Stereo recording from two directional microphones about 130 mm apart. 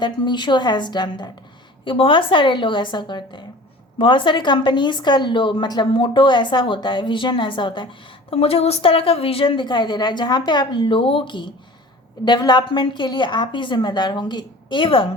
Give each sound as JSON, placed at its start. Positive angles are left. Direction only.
{"t": 0.0, "sound": "a woman's voice", "side_deg": 35}